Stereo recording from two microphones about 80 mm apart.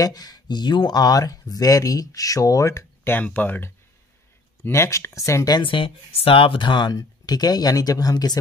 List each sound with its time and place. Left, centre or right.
0.0 s speech: left
4.6 s speech: left
5.5 s speech: left
7.0 s speech: left